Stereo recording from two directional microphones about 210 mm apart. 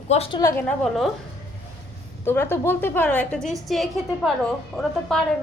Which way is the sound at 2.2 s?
10° left (ahead or behind).